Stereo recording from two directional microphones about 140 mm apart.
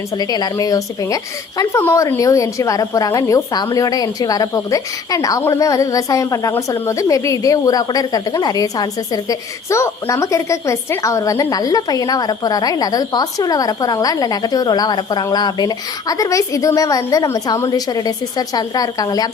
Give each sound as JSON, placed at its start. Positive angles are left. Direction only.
{"t": 0.2, "sound": "a woman's voice", "side_deg": 25}